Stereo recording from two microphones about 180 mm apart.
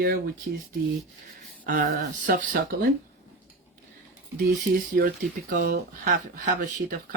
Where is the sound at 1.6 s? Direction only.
55° right (ahead or behind).